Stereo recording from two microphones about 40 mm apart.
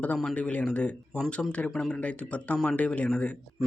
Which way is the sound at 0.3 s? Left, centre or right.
Left.